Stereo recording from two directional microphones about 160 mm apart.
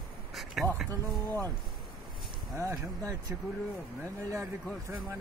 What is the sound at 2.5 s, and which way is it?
Speech, 20° right (ahead or behind).